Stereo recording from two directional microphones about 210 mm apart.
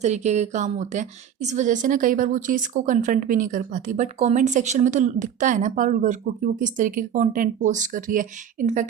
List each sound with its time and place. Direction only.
0.0 s a woman's voice: 35° right (ahead or behind)